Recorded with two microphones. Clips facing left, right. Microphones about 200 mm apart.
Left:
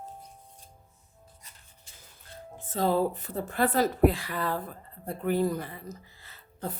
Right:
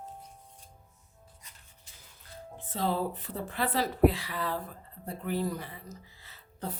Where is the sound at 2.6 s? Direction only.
45° left (ahead or behind).